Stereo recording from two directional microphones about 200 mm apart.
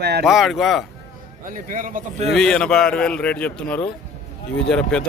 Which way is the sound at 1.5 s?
40° right (ahead or behind).